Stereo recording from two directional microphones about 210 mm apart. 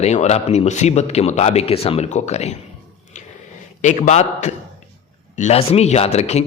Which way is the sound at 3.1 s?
35° left (ahead or behind).